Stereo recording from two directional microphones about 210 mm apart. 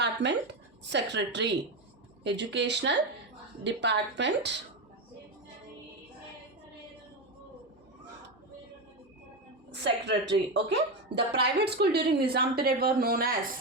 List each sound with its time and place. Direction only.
0.0 s a sound: 55° right (ahead or behind)
0.9 s a woman's voice: 55° right (ahead or behind)
9.8 s a woman's voice: 55° right (ahead or behind)